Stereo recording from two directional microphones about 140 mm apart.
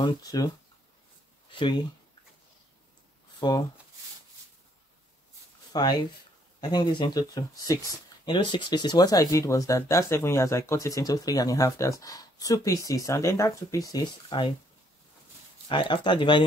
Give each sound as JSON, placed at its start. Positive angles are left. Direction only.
{"t": 0.0, "sound": "speech", "side_deg": 25}
{"t": 1.5, "sound": "speech", "side_deg": 35}
{"t": 3.3, "sound": "speech", "side_deg": 30}
{"t": 5.7, "sound": "speech", "side_deg": 30}
{"t": 15.7, "sound": "speech", "side_deg": 35}